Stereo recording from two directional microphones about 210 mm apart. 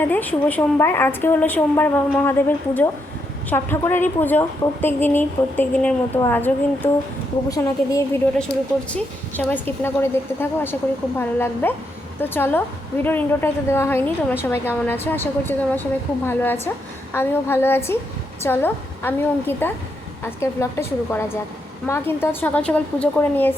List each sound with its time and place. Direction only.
0.1 s a woman's voice: 10° left (ahead or behind)
3.5 s a woman's voice: 10° left (ahead or behind)
8.5 s speech: 50° left (ahead or behind)
8.9 s a woman's voice: 5° left (ahead or behind)